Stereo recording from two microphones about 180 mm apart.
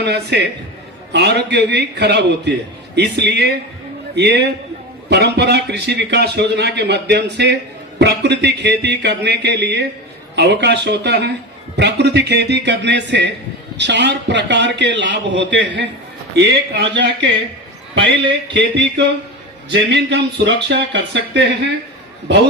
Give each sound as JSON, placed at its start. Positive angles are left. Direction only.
{"t": 0.0, "sound": "a man's voice", "side_deg": -70}
{"t": 18.5, "sound": "a sound", "side_deg": -85}
{"t": 19.7, "sound": "a man's voice", "side_deg": -70}